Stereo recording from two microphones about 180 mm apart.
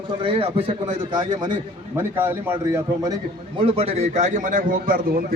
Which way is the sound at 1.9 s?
15° right (ahead or behind).